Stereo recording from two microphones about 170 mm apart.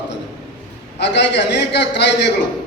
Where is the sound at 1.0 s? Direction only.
85° left.